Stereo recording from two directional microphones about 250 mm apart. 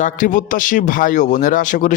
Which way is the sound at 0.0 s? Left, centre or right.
Left.